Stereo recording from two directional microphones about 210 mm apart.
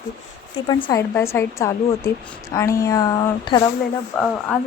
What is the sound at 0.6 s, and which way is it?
Speech, 20° left (ahead or behind).